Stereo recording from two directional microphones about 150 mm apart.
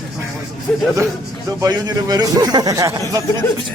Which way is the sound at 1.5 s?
25° right (ahead or behind).